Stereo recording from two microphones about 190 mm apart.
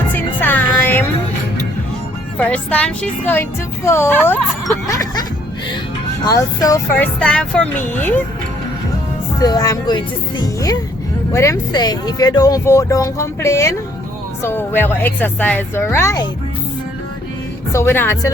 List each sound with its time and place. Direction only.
0.1 s music: 10° left (ahead or behind)
2.4 s speech: 5° left (ahead or behind)
4.9 s music: 20° left (ahead or behind)
6.2 s speech: 20° left (ahead or behind)
9.4 s speech: 20° left (ahead or behind)
17.7 s speech: 15° left (ahead or behind)